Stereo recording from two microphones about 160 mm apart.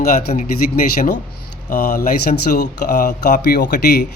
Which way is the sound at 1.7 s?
55° left (ahead or behind).